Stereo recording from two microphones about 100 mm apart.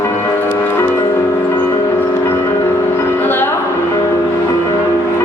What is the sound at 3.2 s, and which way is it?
Music, 20° left (ahead or behind).